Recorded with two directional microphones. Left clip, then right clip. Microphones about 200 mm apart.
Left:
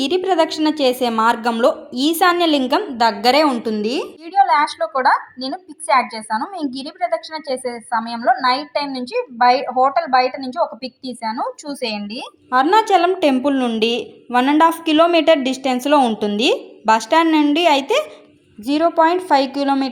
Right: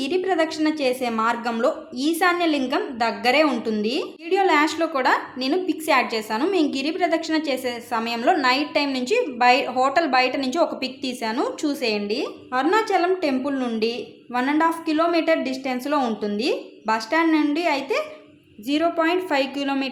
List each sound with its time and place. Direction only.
0.0 s a woman's voice: 30° left (ahead or behind)
12.5 s a woman's voice: 25° left (ahead or behind)